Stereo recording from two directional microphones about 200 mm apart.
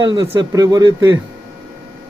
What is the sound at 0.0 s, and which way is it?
A man's voice, 20° right (ahead or behind).